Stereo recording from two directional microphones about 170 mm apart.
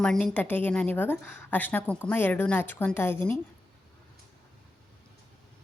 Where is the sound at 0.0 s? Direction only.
5° left (ahead or behind).